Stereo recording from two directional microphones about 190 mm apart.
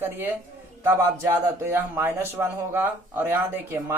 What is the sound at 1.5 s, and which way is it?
Speech, 15° right (ahead or behind).